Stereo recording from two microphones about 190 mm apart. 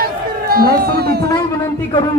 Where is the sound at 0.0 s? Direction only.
50° right (ahead or behind).